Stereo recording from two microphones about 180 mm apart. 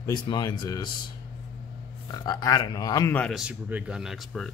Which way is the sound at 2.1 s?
20° left (ahead or behind).